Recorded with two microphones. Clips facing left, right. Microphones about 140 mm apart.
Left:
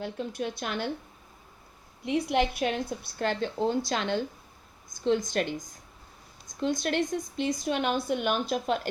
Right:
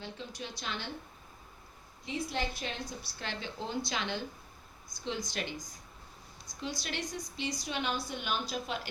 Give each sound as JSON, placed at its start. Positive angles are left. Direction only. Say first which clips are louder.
{"t": 0.0, "sound": "speech", "louder": "left 10 dB", "side_deg": 55}
{"t": 2.0, "sound": "a woman's voice", "louder": "left 9 dB", "side_deg": 70}
{"t": 6.7, "sound": "a woman's voice", "louder": "left 11 dB", "side_deg": 50}